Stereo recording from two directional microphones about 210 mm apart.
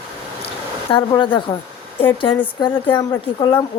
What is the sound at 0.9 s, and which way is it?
Speech, 25° left (ahead or behind).